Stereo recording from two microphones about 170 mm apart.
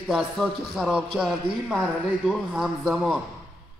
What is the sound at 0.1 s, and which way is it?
A man's voice, centre (ahead or behind).